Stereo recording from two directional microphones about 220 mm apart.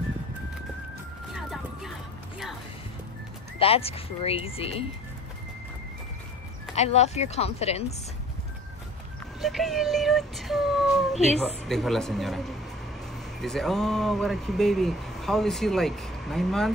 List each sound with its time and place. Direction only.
1.3 s vehicle: centre (ahead or behind)
3.5 s speech: 25° left (ahead or behind)
6.7 s speech: 30° left (ahead or behind)
9.4 s speech: centre (ahead or behind)